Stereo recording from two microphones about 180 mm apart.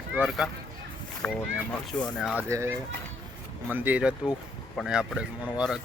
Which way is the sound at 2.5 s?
15° right (ahead or behind).